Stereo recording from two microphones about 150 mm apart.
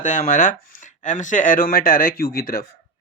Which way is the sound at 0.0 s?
60° left (ahead or behind).